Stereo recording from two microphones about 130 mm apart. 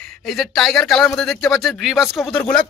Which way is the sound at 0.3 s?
Centre (ahead or behind).